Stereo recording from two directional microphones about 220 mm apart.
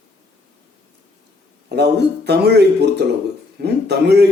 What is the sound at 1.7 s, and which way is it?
Speech, 50° right (ahead or behind).